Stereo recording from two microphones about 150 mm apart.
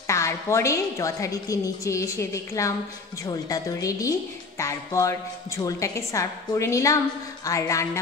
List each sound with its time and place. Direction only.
0.0 s a woman's voice: 20° left (ahead or behind)